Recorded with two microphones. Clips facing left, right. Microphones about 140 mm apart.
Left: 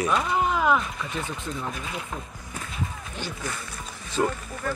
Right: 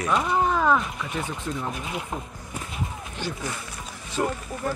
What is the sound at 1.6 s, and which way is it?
Speech, 20° right (ahead or behind).